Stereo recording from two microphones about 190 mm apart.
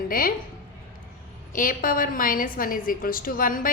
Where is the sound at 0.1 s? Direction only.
50° left (ahead or behind).